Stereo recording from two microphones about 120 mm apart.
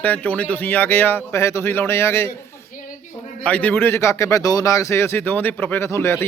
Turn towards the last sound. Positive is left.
turn(degrees=20)  # may be behind; listen again after turning